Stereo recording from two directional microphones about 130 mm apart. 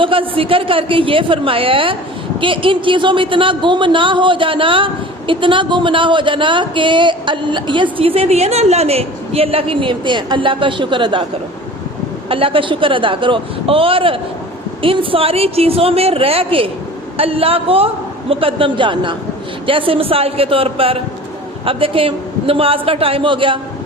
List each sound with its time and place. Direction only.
0.0 s a man's voice: 45° right (ahead or behind)
12.3 s a man's voice: 45° right (ahead or behind)